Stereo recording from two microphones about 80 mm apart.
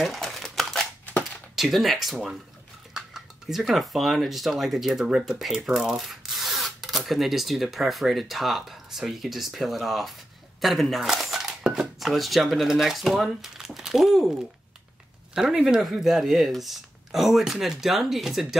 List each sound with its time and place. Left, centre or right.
0.0 s crumpling: centre
1.0 s chopping: left
1.5 s speech: centre
15.3 s speech: centre